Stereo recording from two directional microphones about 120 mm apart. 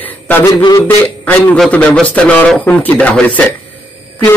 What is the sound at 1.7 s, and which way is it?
Speech, 10° left (ahead or behind).